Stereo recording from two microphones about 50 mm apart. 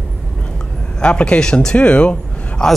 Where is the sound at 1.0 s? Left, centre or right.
Left.